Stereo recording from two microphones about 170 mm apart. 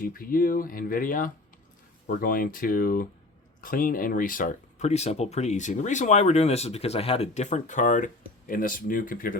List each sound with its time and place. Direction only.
0.1 s speech: 55° left (ahead or behind)